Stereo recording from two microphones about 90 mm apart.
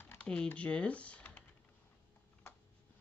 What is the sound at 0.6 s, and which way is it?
Speech, 15° left (ahead or behind).